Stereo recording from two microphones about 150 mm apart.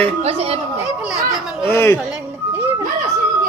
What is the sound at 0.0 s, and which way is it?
Chatter, 40° right (ahead or behind).